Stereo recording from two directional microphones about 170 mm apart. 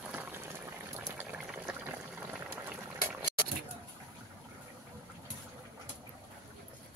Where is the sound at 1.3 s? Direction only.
10° right (ahead or behind).